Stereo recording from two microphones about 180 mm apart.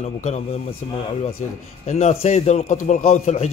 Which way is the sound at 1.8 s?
40° left (ahead or behind).